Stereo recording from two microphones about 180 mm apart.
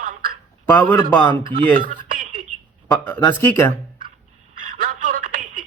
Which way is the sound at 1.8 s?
50° right (ahead or behind).